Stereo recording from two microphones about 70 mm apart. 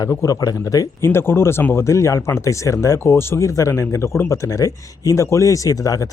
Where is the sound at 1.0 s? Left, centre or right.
Left.